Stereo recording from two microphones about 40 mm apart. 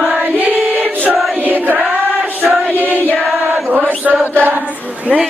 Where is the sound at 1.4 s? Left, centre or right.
Right.